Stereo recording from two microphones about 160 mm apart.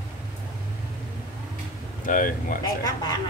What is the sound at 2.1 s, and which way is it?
Speech, 55° left (ahead or behind).